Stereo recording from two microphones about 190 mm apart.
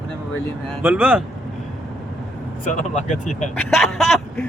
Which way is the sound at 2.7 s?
40° left (ahead or behind).